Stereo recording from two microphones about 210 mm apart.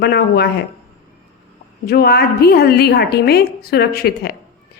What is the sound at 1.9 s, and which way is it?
A woman's voice, 50° left (ahead or behind).